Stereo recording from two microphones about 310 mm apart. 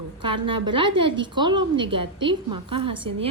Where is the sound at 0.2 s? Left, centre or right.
Centre.